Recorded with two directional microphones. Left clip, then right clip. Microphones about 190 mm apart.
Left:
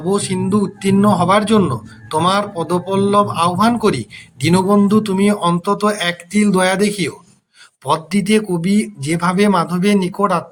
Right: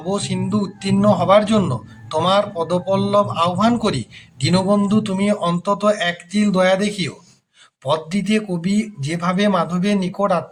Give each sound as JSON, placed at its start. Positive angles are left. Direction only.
{"t": 0.1, "sound": "speech", "side_deg": 30}